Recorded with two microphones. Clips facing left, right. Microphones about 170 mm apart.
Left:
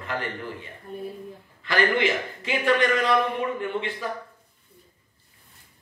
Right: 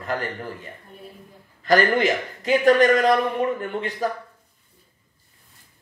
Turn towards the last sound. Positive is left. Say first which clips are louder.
# right 3 dB
turn(degrees=-40)  # may be behind; listen again after turning